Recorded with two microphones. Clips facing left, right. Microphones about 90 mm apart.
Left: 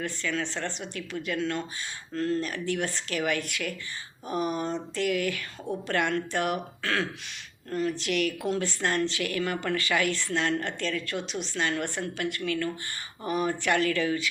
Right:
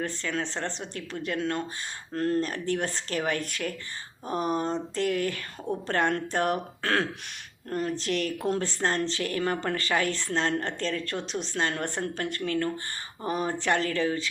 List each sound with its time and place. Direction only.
0.0 s a woman's voice: 35° right (ahead or behind)
1.4 s speech: 45° right (ahead or behind)
2.4 s a woman's voice: 35° right (ahead or behind)